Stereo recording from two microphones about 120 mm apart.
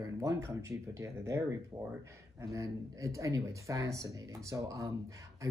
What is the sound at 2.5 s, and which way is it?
Speech, 25° right (ahead or behind).